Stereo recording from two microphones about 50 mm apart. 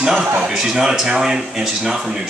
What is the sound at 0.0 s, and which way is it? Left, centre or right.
Speech, centre.